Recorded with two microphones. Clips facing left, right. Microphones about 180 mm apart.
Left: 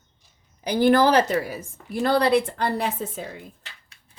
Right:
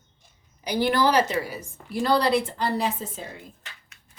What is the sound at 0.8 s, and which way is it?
Speech, 50° left (ahead or behind).